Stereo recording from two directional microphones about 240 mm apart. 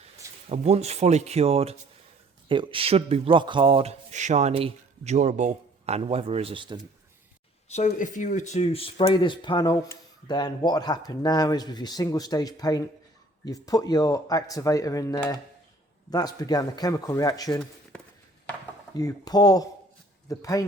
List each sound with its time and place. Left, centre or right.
0.4 s speech: right
7.7 s speech: left
18.9 s speech: centre